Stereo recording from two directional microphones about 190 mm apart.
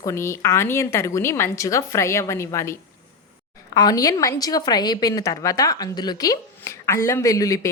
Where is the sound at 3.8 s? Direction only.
20° left (ahead or behind).